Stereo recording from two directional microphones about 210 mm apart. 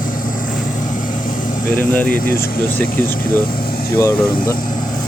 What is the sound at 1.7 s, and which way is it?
Speech, 5° left (ahead or behind).